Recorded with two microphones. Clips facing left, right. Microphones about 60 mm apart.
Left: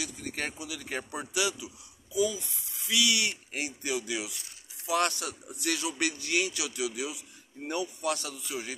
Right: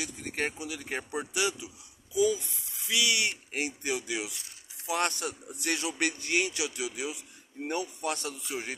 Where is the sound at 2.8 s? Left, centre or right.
Right.